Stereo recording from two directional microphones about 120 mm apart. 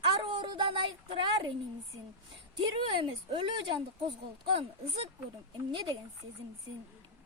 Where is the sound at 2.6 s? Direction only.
45° right (ahead or behind).